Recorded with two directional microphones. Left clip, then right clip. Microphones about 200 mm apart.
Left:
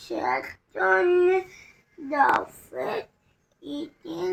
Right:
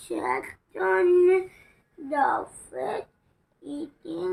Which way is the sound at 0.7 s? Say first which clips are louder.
Left 1 dB; 40° left (ahead or behind).